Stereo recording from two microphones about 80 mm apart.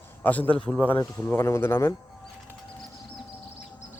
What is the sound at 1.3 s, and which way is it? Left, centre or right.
Speech, left.